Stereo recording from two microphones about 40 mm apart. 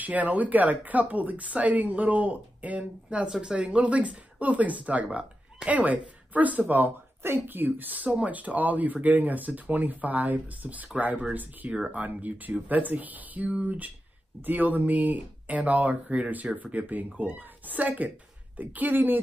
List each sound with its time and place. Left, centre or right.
0.0 s a woman's voice: right
3.3 s speech: centre
3.5 s a woman's voice: right
11.9 s speech: right